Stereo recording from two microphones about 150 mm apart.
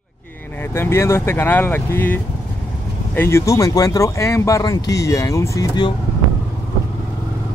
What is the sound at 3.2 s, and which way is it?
Speech, 20° left (ahead or behind).